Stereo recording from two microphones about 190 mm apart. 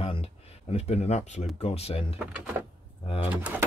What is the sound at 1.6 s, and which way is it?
Speech, 30° left (ahead or behind).